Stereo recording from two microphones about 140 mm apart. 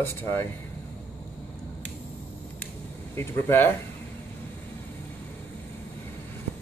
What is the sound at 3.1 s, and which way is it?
Speech, 15° left (ahead or behind).